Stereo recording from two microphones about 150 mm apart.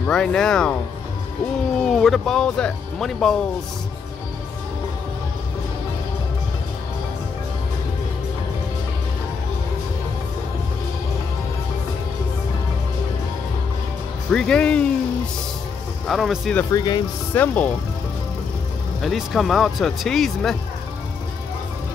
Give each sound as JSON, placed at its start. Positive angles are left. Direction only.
{"t": 0.0, "sound": "speech", "side_deg": 5}
{"t": 1.8, "sound": "speech", "side_deg": 5}
{"t": 14.3, "sound": "speech", "side_deg": 5}
{"t": 16.1, "sound": "speech", "side_deg": 0}
{"t": 16.7, "sound": "speech", "side_deg": 30}
{"t": 17.3, "sound": "speech", "side_deg": 10}
{"t": 18.9, "sound": "speech", "side_deg": 0}